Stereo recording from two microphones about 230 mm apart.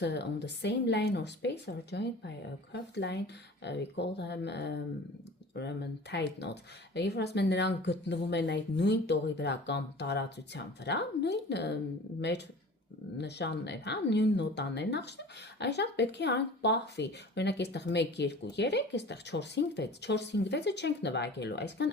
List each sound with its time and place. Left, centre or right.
0.0 s speech: left
13.1 s speech: left